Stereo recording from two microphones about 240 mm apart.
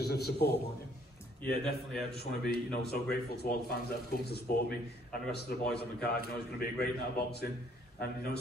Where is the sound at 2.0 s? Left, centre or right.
Left.